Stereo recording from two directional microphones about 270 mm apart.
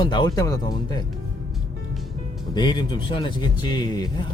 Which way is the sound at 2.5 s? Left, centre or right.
Centre.